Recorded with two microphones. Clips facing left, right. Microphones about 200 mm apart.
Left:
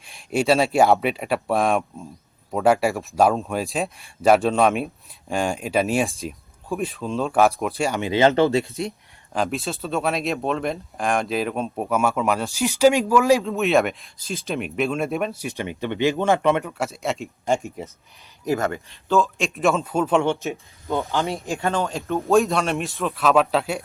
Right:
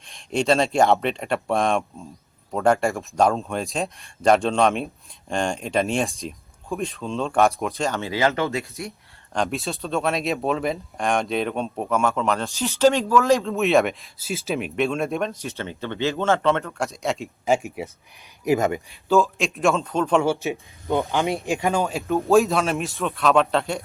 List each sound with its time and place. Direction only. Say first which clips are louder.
0.1 s speech: left 1 dB; 5° left (ahead or behind); by 8.6 s 30° left (ahead or behind)
9.3 s speech: left 1 dB; centre (ahead or behind)
13.4 s speech: even; centre (ahead or behind)
20.4 s speech: right 2 dB; 15° right (ahead or behind); by 23.8 s 5° left (ahead or behind)